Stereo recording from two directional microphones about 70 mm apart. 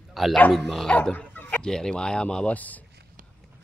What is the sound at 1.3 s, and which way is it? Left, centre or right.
Chicken, left.